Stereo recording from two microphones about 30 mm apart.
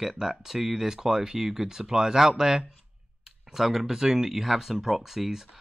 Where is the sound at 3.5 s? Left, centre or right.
Centre.